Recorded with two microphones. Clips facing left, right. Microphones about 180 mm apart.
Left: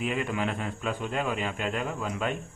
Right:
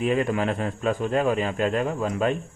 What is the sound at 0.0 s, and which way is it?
Speech, 40° right (ahead or behind).